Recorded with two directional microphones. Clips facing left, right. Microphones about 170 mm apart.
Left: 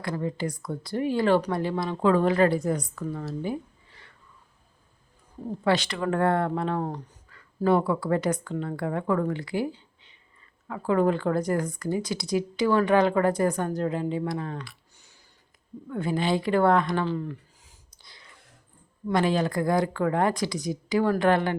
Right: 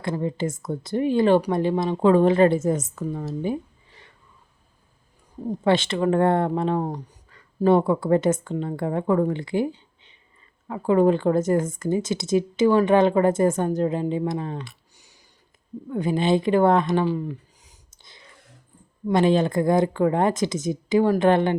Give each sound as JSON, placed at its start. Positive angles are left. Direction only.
{"t": 0.0, "sound": "speech", "side_deg": -25}
{"t": 5.5, "sound": "speech", "side_deg": -25}